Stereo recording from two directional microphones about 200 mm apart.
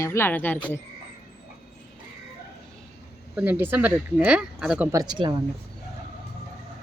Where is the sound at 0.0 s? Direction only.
10° left (ahead or behind).